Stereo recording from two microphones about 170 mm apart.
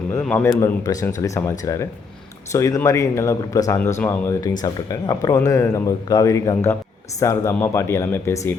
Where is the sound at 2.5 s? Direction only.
20° left (ahead or behind).